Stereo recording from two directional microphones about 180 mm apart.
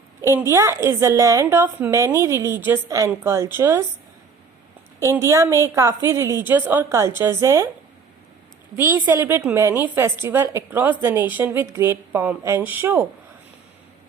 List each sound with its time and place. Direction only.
0.2 s a woman's voice: 15° right (ahead or behind)
4.9 s a woman's voice: 15° right (ahead or behind)
8.7 s a woman's voice: 10° right (ahead or behind)